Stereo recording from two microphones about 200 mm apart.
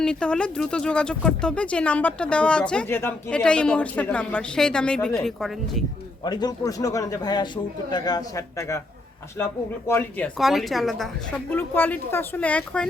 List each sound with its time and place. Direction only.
0.0 s speech: 5° left (ahead or behind)
6.2 s a man's voice: 20° left (ahead or behind)
10.3 s speech: centre (ahead or behind)